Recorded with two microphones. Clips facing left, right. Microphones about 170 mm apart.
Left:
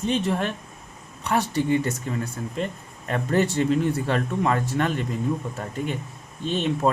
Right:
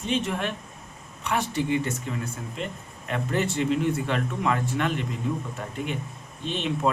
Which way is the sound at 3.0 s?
40° left (ahead or behind).